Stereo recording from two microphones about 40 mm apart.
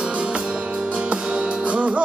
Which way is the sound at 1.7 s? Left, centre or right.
Right.